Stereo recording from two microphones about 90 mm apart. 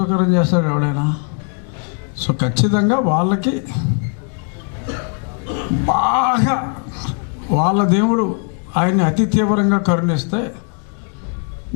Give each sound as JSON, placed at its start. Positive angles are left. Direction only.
{"t": 0.0, "sound": "a man's voice", "side_deg": 15}
{"t": 5.5, "sound": "a man's voice", "side_deg": 20}